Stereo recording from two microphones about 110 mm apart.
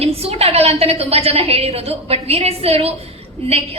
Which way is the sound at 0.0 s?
65° right (ahead or behind).